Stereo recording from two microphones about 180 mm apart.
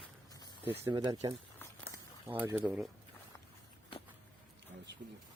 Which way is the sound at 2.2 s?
10° right (ahead or behind).